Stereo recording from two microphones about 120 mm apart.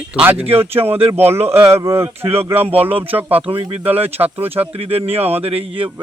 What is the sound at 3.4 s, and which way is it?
Speech, 50° right (ahead or behind).